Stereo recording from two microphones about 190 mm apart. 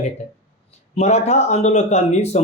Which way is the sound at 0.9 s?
35° left (ahead or behind).